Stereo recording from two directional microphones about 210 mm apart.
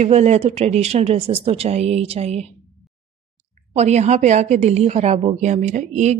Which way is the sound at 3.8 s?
30° right (ahead or behind).